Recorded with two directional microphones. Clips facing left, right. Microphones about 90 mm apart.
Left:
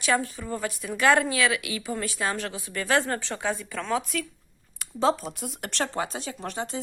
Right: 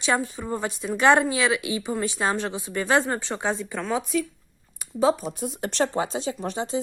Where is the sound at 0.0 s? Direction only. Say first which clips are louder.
Right 1 dB; 20° right (ahead or behind).